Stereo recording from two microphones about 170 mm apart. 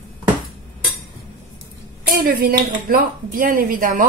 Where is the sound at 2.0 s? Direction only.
55° right (ahead or behind).